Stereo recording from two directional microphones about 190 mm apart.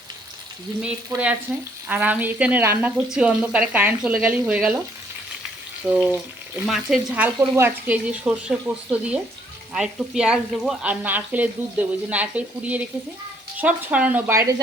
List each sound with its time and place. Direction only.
0.8 s speech: 5° right (ahead or behind)
5.8 s speech: 5° right (ahead or behind)